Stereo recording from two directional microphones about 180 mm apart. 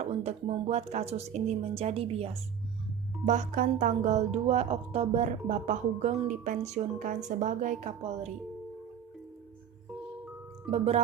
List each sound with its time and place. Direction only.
0.0 s speech: 35° right (ahead or behind)
10.7 s speech: 40° right (ahead or behind)